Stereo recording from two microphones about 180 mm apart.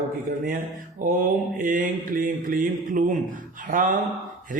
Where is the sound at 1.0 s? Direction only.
45° right (ahead or behind).